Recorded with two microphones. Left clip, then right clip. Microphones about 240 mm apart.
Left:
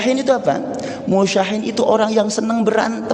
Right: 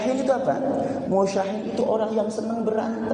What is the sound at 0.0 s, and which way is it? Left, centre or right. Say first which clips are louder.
Speech: left 6 dB; left.